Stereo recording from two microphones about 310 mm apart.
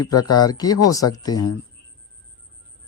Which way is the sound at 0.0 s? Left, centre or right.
Left.